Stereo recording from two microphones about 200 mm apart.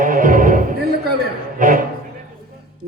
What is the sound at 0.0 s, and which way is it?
Music, 40° right (ahead or behind).